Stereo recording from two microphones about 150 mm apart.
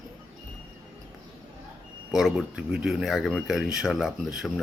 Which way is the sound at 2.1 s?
5° right (ahead or behind).